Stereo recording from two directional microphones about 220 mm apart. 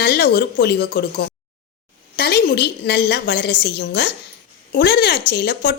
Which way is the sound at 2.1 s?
50° left (ahead or behind).